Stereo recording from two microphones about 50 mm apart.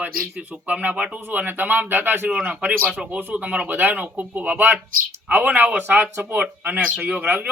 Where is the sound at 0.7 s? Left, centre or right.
Right.